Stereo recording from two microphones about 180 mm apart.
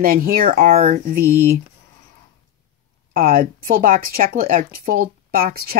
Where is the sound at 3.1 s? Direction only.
50° right (ahead or behind).